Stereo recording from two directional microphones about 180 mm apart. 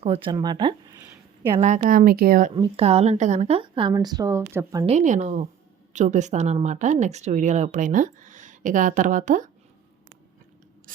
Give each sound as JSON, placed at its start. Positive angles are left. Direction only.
{"t": 0.0, "sound": "a woman's voice", "side_deg": -35}
{"t": 0.3, "sound": "speech", "side_deg": -25}
{"t": 1.5, "sound": "speech", "side_deg": -35}
{"t": 2.6, "sound": "a woman's voice", "side_deg": -35}
{"t": 4.9, "sound": "a woman's voice", "side_deg": -40}
{"t": 10.9, "sound": "speech", "side_deg": -50}